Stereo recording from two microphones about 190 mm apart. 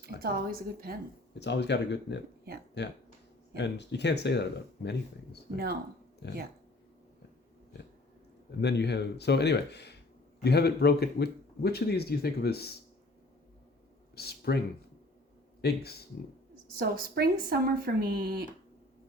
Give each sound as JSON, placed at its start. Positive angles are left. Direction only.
{"t": 0.2, "sound": "speech", "side_deg": -50}
{"t": 1.3, "sound": "speech", "side_deg": 65}
{"t": 8.6, "sound": "speech", "side_deg": 65}
{"t": 14.2, "sound": "speech", "side_deg": 55}
{"t": 15.6, "sound": "speech", "side_deg": 55}
{"t": 16.7, "sound": "speech", "side_deg": -50}